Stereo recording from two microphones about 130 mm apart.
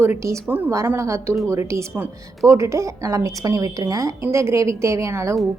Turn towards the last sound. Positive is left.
turn(degrees=-25)  # may be behind; listen again after turning